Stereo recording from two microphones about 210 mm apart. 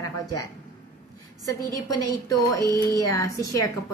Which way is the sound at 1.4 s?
15° left (ahead or behind).